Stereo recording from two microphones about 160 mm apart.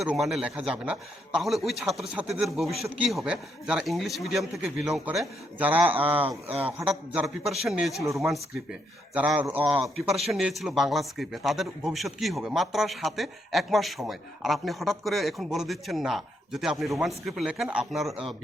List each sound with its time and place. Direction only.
0.0 s speech: 5° right (ahead or behind)
8.0 s speech: 20° right (ahead or behind)
9.1 s a man's voice: 10° right (ahead or behind)
9.8 s speech: centre (ahead or behind)